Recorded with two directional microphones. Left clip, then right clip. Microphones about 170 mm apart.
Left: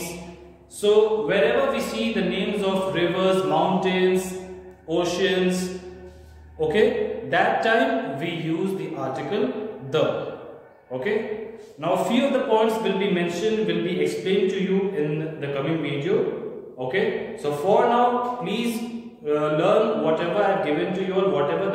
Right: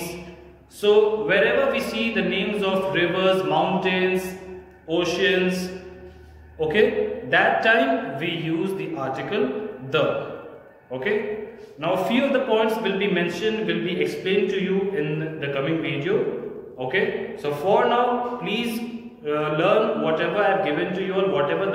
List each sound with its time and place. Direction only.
0.7 s a man's voice: 25° left (ahead or behind)
6.6 s a man's voice: 25° left (ahead or behind)
10.9 s a man's voice: 25° left (ahead or behind)